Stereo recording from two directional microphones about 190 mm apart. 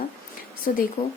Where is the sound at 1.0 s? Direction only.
25° left (ahead or behind).